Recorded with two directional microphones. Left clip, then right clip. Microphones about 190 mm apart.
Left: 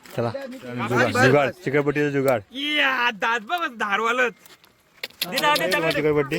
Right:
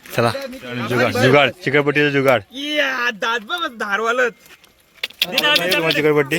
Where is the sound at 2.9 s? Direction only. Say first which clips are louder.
Right 2 dB; 25° left (ahead or behind).